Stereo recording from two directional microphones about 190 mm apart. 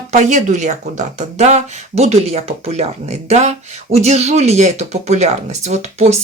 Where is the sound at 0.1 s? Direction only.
40° right (ahead or behind).